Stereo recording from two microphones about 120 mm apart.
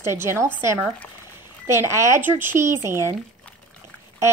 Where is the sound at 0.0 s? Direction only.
20° right (ahead or behind).